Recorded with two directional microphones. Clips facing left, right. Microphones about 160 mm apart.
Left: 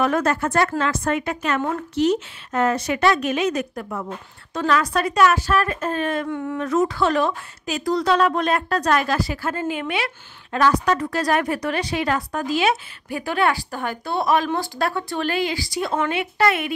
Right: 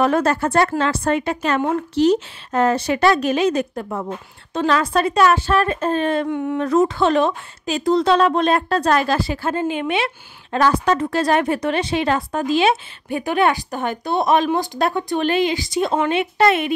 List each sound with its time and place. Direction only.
0.0 s a woman's voice: 30° right (ahead or behind)